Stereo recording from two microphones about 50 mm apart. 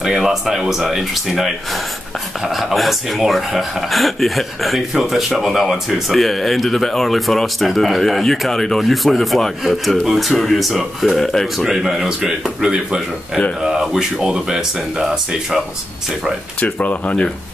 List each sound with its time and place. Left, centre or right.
0.0 s speech: centre
16.6 s speech: left